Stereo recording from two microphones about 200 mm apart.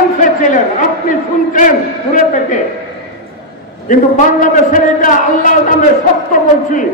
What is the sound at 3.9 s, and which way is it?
A man's voice, 45° left (ahead or behind).